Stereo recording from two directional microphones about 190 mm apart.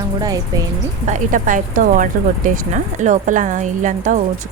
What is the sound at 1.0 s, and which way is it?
Speech, 40° right (ahead or behind).